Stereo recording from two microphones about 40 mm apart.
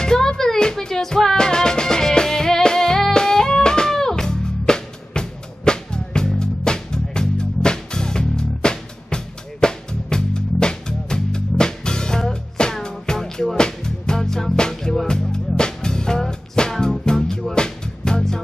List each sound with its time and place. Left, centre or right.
0.0 s music: centre